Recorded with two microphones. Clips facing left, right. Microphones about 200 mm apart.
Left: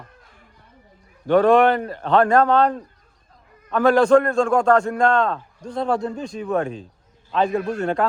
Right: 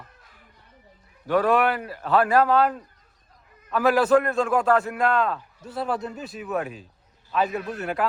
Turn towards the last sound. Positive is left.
turn(degrees=30)  # may be behind; listen again after turning